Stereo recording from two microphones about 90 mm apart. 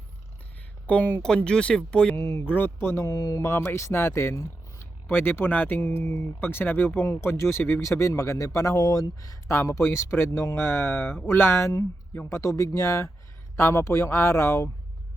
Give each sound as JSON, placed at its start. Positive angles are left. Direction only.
{"t": 0.9, "sound": "speech", "side_deg": 20}
{"t": 2.1, "sound": "speech", "side_deg": 30}